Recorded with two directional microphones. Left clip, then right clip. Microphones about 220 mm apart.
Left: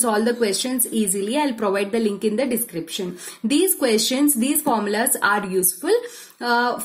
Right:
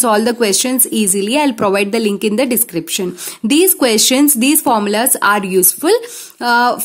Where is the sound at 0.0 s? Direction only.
45° right (ahead or behind).